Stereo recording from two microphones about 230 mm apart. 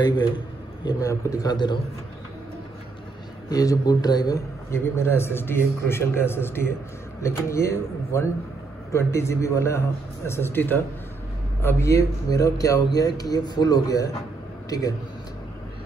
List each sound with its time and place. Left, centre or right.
0.8 s a man's voice: centre
3.4 s a man's voice: centre